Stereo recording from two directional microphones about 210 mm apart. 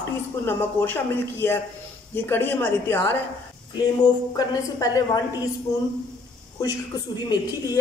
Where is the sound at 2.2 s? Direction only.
10° left (ahead or behind).